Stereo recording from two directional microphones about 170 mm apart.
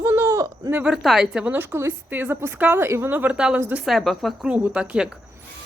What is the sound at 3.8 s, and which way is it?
Speech, centre (ahead or behind).